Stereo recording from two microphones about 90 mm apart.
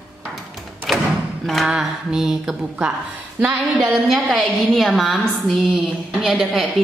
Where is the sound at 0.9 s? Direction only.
5° left (ahead or behind).